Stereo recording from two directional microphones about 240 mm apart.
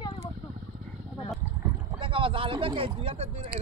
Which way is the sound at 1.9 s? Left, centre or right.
Right.